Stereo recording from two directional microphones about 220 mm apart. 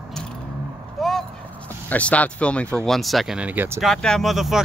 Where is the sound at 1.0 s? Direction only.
Centre (ahead or behind).